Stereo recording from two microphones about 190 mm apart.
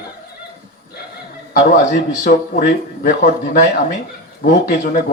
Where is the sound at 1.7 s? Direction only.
45° left (ahead or behind).